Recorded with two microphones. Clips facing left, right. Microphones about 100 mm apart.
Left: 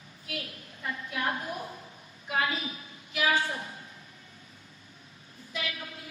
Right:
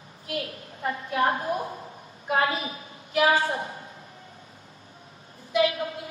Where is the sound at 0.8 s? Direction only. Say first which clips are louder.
Right 9 dB; 40° right (ahead or behind).